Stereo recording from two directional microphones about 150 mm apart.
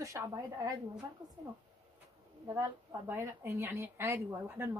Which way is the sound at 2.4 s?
20° right (ahead or behind).